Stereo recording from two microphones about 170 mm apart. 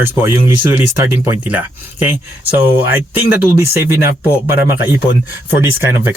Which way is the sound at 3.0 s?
15° right (ahead or behind).